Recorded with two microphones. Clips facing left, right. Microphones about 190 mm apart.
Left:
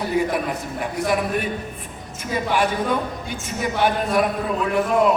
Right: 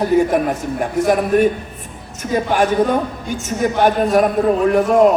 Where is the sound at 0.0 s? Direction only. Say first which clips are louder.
Right 7 dB; 45° right (ahead or behind).